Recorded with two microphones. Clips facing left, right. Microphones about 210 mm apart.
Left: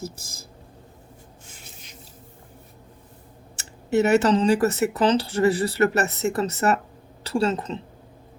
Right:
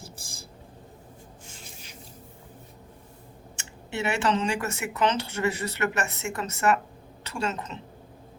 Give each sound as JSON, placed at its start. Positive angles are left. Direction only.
{"t": 0.0, "sound": "speech", "side_deg": 40}
{"t": 3.5, "sound": "speech", "side_deg": 40}